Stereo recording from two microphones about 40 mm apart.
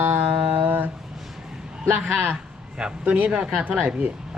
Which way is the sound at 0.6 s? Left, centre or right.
Right.